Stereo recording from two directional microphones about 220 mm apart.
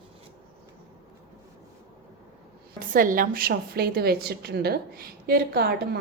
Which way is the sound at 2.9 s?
40° right (ahead or behind).